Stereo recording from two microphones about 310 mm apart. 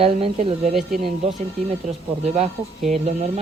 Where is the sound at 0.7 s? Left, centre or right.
Centre.